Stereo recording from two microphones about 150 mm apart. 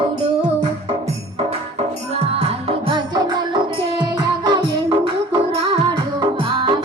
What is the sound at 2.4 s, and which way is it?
Music, 40° right (ahead or behind).